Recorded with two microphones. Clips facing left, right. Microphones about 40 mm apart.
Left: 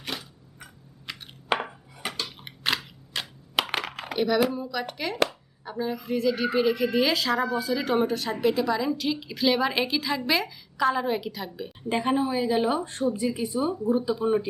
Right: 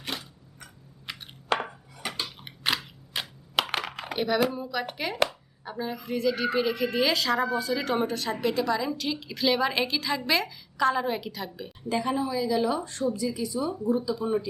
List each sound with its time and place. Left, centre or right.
0.0 s a sound: centre
1.1 s chopping: centre
1.5 s chopping: centre
2.2 s a sound: centre
3.1 s computer keyboard: centre
3.5 s a woman's voice: centre
11.8 s a woman's voice: left